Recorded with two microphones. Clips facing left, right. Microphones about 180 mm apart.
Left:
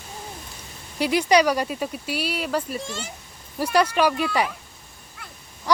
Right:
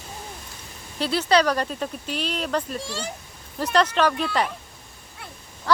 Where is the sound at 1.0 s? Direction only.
15° left (ahead or behind).